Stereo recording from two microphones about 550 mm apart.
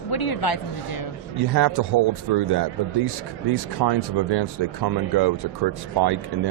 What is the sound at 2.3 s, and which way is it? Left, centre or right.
Speech, right.